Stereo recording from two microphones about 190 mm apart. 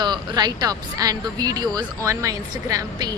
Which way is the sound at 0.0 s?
20° right (ahead or behind).